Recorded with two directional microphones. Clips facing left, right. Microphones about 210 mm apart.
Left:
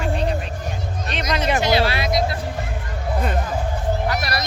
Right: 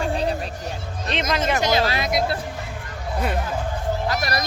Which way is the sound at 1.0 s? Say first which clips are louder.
Right 4 dB; 25° right (ahead or behind).